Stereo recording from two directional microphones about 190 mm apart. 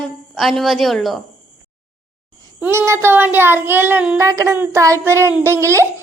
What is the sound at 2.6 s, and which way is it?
A child's voice, 15° right (ahead or behind).